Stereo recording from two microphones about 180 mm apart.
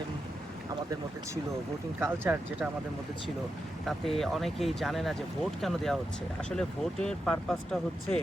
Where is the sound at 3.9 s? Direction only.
Centre (ahead or behind).